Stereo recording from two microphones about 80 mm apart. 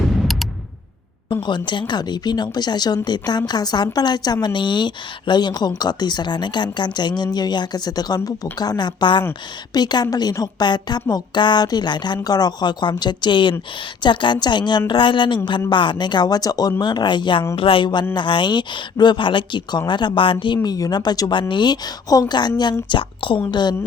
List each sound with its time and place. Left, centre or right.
1.3 s a woman's voice: left
9.7 s a woman's voice: left
18.1 s speech: left
20.6 s a woman's voice: left
23.5 s speech: left